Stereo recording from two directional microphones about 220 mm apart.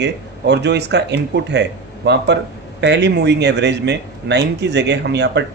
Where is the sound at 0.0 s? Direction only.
50° right (ahead or behind).